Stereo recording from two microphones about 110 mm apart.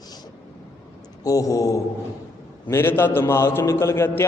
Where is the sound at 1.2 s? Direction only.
30° left (ahead or behind).